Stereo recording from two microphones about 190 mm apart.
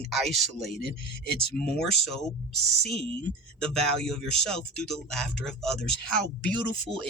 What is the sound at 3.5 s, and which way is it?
Speech, 5° left (ahead or behind).